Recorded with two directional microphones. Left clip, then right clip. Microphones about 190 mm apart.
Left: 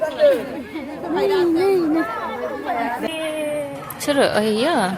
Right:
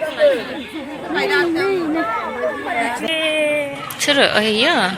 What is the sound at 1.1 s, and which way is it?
Speech, 15° right (ahead or behind).